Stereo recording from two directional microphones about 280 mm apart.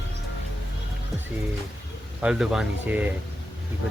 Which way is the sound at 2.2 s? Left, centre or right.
Centre.